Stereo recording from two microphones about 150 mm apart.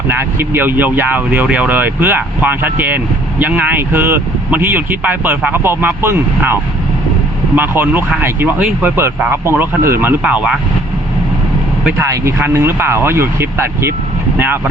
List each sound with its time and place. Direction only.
0.1 s speech: 15° right (ahead or behind)
11.9 s speech: 20° right (ahead or behind)